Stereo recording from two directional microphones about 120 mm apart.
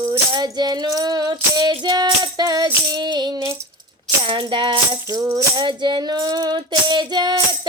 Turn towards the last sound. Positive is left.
turn(degrees=-35)  # may be behind; listen again after turning